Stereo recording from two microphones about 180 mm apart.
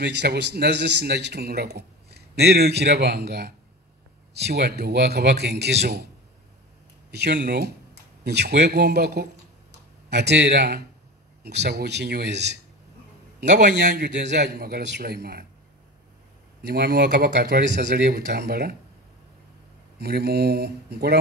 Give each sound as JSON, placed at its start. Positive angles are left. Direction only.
{"t": 0.0, "sound": "speech", "side_deg": -65}
{"t": 7.1, "sound": "a man's voice", "side_deg": -70}
{"t": 16.6, "sound": "speech", "side_deg": -60}
{"t": 20.0, "sound": "speech", "side_deg": -60}